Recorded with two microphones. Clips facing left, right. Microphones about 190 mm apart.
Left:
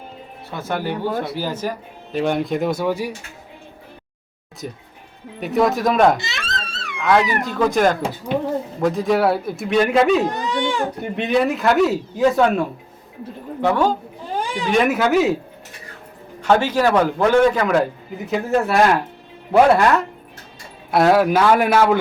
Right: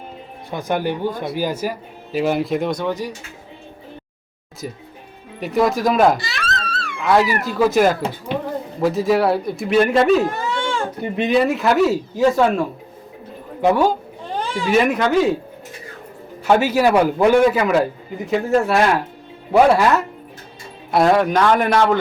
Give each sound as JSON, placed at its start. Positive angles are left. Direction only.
{"t": 0.5, "sound": "a man's voice", "side_deg": -15}
{"t": 4.6, "sound": "speech", "side_deg": -5}
{"t": 6.1, "sound": "a sound", "side_deg": 25}
{"t": 7.0, "sound": "speech", "side_deg": -5}
{"t": 10.2, "sound": "baby cry", "side_deg": 20}
{"t": 11.2, "sound": "speech", "side_deg": 0}
{"t": 13.6, "sound": "a man's voice", "side_deg": -10}
{"t": 14.3, "sound": "a sound", "side_deg": 15}
{"t": 14.7, "sound": "speech", "side_deg": 0}
{"t": 16.4, "sound": "a man's voice", "side_deg": -10}